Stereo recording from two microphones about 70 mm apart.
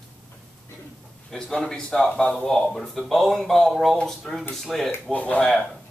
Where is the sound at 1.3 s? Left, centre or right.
Centre.